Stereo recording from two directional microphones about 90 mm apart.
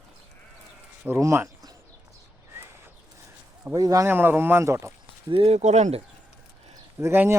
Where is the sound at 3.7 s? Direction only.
40° right (ahead or behind).